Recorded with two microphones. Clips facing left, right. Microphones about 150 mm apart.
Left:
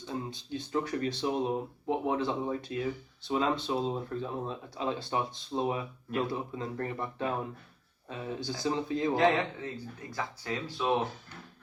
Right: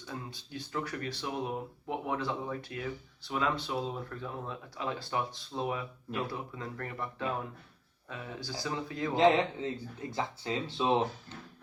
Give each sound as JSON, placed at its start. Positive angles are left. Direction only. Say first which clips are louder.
{"t": 0.1, "sound": "speech", "louder": "left 5 dB", "side_deg": 20}
{"t": 9.1, "sound": "speech", "louder": "right 4 dB", "side_deg": -20}